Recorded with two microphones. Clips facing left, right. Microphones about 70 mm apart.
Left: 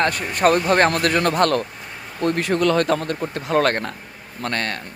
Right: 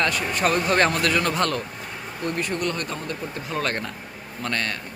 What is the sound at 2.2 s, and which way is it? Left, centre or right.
Speech, left.